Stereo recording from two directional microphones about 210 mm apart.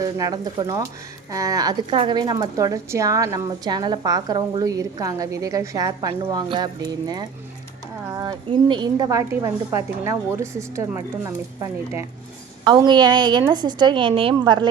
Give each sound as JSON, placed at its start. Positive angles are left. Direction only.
{"t": 0.0, "sound": "a woman's voice", "side_deg": -15}